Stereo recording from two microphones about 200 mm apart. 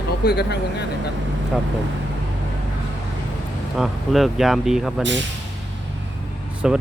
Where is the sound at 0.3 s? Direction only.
55° left (ahead or behind).